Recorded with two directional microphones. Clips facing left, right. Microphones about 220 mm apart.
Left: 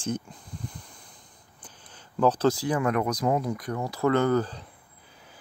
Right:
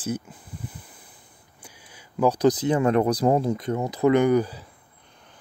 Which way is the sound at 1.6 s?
10° right (ahead or behind).